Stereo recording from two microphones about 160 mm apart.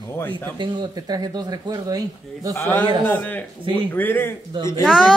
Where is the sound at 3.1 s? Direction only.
10° left (ahead or behind).